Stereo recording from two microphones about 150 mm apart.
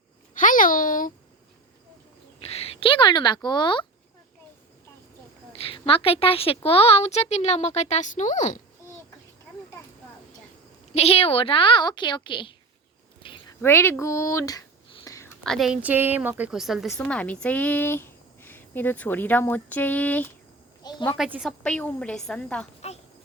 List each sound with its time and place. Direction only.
0.3 s a sound: 65° left (ahead or behind)
2.4 s speech: 40° left (ahead or behind)
5.5 s a woman's voice: 40° left (ahead or behind); by 8.5 s 55° left (ahead or behind)
10.9 s a woman's voice: 40° left (ahead or behind)
13.2 s a sound: 35° left (ahead or behind)
13.6 s speech: 15° left (ahead or behind)
15.0 s whispering: 20° left (ahead or behind)
15.4 s a woman's voice: centre (ahead or behind)
20.8 s a woman's voice: 25° left (ahead or behind)
21.2 s a woman's voice: 5° right (ahead or behind)
21.6 s speech: 10° left (ahead or behind)
22.8 s a sound: 45° left (ahead or behind)